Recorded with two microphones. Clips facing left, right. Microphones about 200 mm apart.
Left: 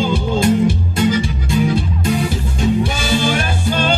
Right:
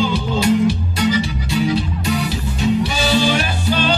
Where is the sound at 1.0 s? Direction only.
50° left (ahead or behind).